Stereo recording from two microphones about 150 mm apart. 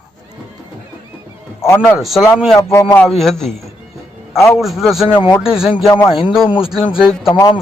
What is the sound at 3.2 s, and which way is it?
Speech, centre (ahead or behind).